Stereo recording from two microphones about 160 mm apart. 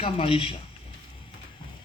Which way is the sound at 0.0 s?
35° left (ahead or behind).